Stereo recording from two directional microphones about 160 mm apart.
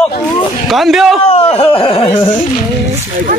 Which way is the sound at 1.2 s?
40° left (ahead or behind).